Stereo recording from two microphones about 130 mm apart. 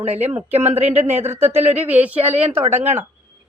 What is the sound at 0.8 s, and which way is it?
Speech, 15° right (ahead or behind).